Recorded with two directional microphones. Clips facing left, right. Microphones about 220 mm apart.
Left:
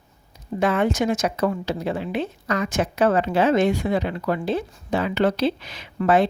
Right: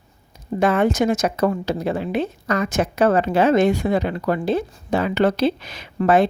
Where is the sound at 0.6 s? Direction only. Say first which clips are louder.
Right 3 dB; 45° right (ahead or behind).